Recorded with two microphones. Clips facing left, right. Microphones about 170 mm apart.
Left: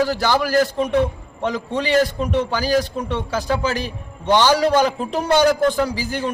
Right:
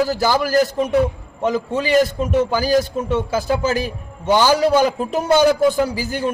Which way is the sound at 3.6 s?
45° right (ahead or behind).